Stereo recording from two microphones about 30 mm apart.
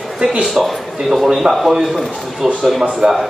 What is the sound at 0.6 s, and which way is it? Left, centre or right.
Speech, centre.